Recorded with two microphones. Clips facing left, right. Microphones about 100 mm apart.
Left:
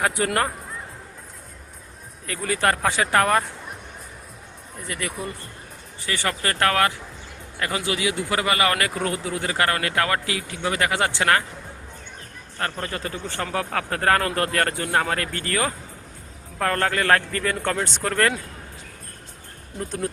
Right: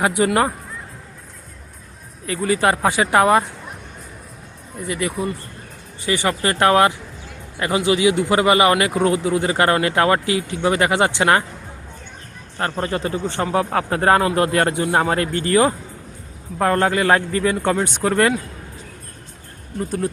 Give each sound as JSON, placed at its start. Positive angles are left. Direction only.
{"t": 0.0, "sound": "a man's voice", "side_deg": -10}
{"t": 2.2, "sound": "a man's voice", "side_deg": -5}
{"t": 4.9, "sound": "speech", "side_deg": -5}
{"t": 6.1, "sound": "a man's voice", "side_deg": -15}
{"t": 12.5, "sound": "a man's voice", "side_deg": -25}
{"t": 19.8, "sound": "speech", "side_deg": 0}